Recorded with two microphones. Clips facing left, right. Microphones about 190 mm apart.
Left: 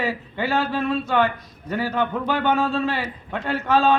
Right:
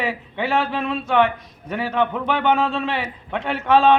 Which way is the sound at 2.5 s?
25° right (ahead or behind).